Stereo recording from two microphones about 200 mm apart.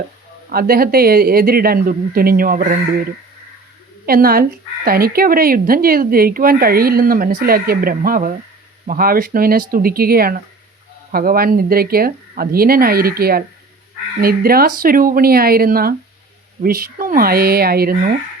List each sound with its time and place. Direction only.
0.5 s speech: 50° right (ahead or behind)
4.0 s speech: 45° right (ahead or behind)